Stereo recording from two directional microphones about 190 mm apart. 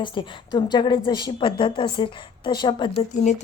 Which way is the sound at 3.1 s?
40° left (ahead or behind).